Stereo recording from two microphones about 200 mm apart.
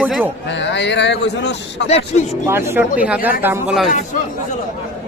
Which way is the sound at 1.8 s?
30° left (ahead or behind).